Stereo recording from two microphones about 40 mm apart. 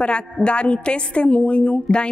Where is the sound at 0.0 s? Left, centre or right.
Left.